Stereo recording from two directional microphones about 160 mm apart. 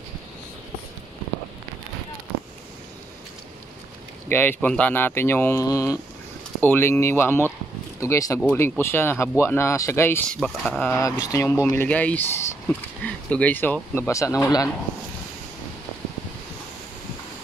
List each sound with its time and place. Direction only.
4.3 s speech: 10° left (ahead or behind)
10.9 s speech: 20° left (ahead or behind)